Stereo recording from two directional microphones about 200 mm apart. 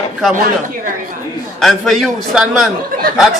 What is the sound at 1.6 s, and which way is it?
A man's voice, centre (ahead or behind).